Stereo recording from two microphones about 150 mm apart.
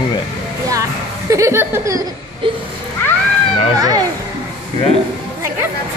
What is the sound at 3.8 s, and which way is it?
Speech, 25° right (ahead or behind).